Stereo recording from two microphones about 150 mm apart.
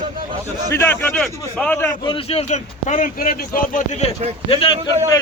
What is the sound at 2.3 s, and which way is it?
Speech, 50° left (ahead or behind).